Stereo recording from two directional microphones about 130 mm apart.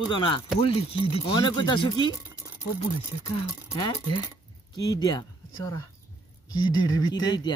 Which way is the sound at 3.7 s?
25° left (ahead or behind).